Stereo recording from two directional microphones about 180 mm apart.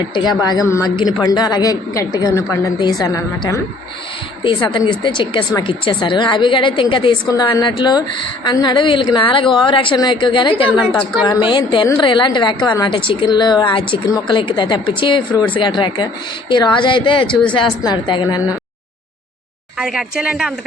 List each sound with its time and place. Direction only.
0.1 s a woman's voice: 25° left (ahead or behind)
19.8 s speech: 5° right (ahead or behind)